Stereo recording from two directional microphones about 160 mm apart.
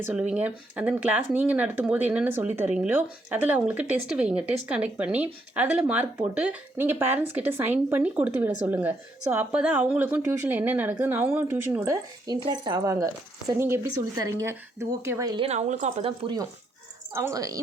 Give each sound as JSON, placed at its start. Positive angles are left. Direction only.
{"t": 0.0, "sound": "speech", "side_deg": -10}
{"t": 12.3, "sound": "speech", "side_deg": -25}
{"t": 15.3, "sound": "speech", "side_deg": -35}